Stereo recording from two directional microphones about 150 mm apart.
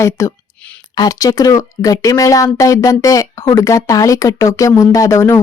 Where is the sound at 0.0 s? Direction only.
20° left (ahead or behind).